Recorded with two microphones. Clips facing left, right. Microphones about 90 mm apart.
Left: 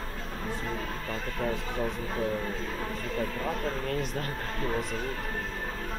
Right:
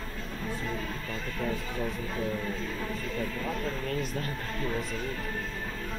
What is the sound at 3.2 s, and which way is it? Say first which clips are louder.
Speech: left 3 dB; 35° left (ahead or behind).